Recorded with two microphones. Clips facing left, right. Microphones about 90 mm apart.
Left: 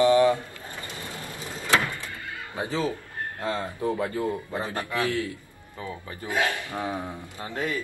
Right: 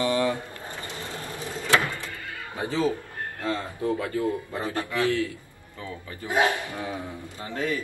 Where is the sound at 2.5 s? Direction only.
20° left (ahead or behind).